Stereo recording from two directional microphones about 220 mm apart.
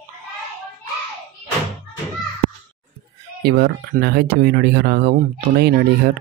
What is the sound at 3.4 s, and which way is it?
Speech, 45° right (ahead or behind).